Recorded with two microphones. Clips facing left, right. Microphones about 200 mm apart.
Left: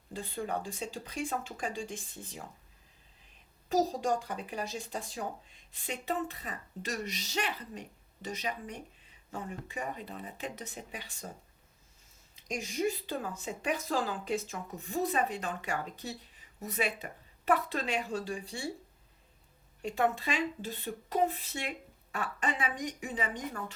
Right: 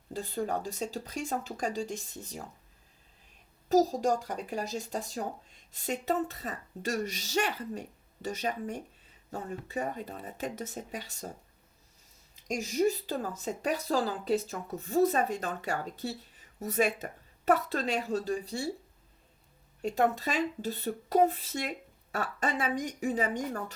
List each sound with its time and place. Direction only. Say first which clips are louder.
0.1 s speech: right 3 dB; 40° right (ahead or behind)
3.7 s speech: right 4 dB; 40° right (ahead or behind)
12.5 s speech: right 5 dB; 40° right (ahead or behind)
19.8 s speech: right 3 dB; 40° right (ahead or behind)